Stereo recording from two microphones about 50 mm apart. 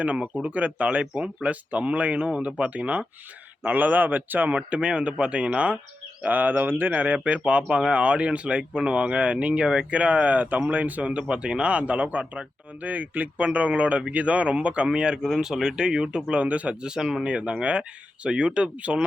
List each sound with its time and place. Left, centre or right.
0.0 s speech: right
6.2 s speech: right